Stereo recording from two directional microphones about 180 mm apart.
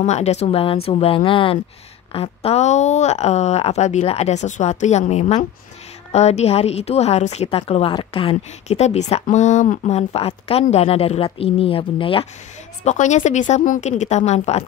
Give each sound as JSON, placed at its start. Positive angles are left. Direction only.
{"t": 0.0, "sound": "a woman's voice", "side_deg": 40}
{"t": 12.8, "sound": "a woman's voice", "side_deg": 40}